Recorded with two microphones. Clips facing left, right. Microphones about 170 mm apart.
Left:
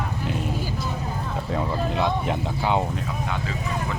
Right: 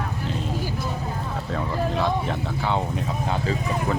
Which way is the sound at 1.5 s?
15° left (ahead or behind).